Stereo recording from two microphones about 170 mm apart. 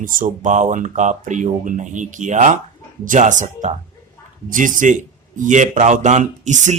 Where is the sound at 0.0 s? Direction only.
50° right (ahead or behind).